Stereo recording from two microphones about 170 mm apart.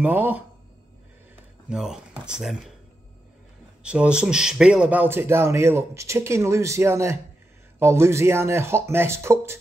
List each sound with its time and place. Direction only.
0.0 s speech: 10° right (ahead or behind)
1.7 s speech: 5° right (ahead or behind)
3.8 s speech: 5° right (ahead or behind)